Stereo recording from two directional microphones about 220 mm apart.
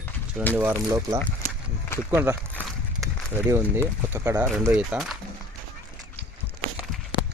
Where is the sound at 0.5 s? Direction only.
10° right (ahead or behind).